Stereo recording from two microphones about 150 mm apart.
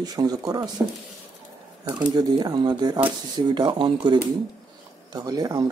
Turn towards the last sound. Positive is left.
turn(degrees=-25)  # may be behind; listen again after turning